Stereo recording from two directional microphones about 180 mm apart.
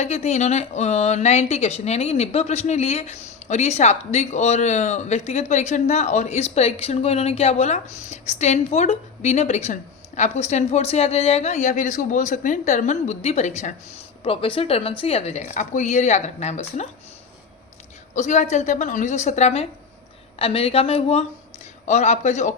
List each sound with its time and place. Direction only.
0.0 s a woman's voice: 35° left (ahead or behind)
18.1 s a woman's voice: 40° left (ahead or behind)